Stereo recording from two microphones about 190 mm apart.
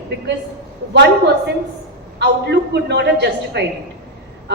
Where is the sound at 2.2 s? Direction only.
65° right (ahead or behind).